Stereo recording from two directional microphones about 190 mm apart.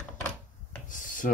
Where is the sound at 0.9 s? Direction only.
45° left (ahead or behind).